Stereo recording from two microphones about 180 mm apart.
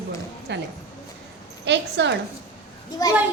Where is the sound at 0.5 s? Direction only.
75° right (ahead or behind).